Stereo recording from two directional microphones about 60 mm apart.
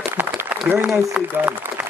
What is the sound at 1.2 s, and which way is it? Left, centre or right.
Speech, centre.